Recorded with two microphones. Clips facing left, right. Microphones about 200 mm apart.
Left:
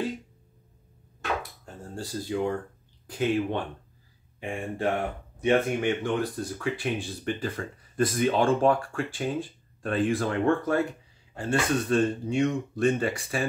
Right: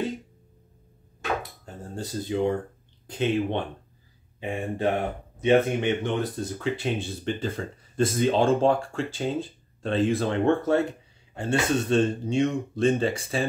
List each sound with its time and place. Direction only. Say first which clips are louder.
2.0 s speech: right 2 dB; 20° right (ahead or behind)